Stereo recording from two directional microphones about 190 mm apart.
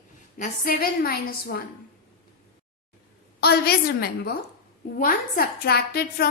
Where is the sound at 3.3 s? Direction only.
55° left (ahead or behind).